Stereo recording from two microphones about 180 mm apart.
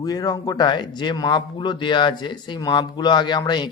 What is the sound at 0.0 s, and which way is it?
Speech, 20° left (ahead or behind).